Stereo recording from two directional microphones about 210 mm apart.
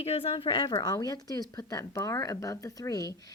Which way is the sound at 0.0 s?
25° left (ahead or behind).